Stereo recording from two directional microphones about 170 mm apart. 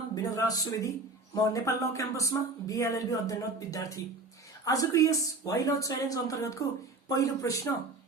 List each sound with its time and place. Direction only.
0.1 s speech: 20° left (ahead or behind)